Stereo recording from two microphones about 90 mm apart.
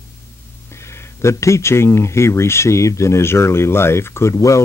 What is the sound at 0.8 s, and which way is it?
Speech, 35° left (ahead or behind).